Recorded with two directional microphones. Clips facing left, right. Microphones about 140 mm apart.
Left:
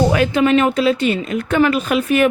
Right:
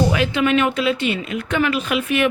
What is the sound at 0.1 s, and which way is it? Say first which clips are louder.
Speech: left 4 dB; 45° left (ahead or behind).